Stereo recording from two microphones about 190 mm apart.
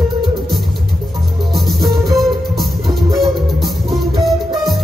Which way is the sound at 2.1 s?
Centre (ahead or behind).